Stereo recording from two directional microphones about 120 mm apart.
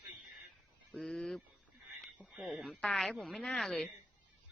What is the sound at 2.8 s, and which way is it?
A woman's voice, 5° left (ahead or behind).